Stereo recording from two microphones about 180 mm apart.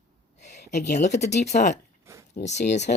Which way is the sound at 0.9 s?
40° left (ahead or behind).